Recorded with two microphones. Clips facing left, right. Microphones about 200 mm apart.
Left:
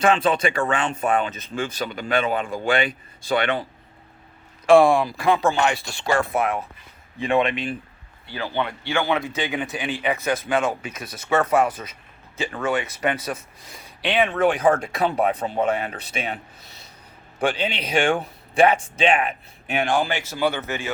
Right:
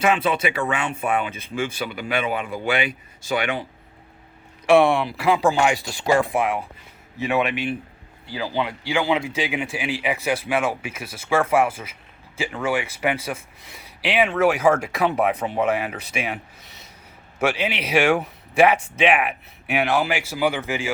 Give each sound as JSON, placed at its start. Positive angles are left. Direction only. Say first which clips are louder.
{"t": 0.0, "sound": "speech", "louder": "left 1 dB", "side_deg": -5}
{"t": 4.8, "sound": "speech", "louder": "left 1 dB", "side_deg": 0}
{"t": 14.9, "sound": "speech", "louder": "right 1 dB", "side_deg": 30}
{"t": 17.4, "sound": "a man's voice", "louder": "right 1 dB", "side_deg": 30}
{"t": 19.9, "sound": "speech", "louder": "right 1 dB", "side_deg": -10}